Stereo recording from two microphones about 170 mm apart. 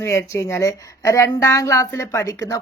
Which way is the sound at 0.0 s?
15° left (ahead or behind).